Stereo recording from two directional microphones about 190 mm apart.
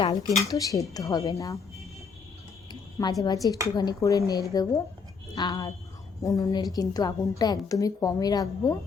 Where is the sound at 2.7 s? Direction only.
20° left (ahead or behind).